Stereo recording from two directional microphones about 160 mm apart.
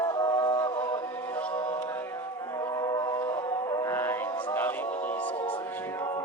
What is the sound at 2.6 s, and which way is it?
Music, 20° left (ahead or behind).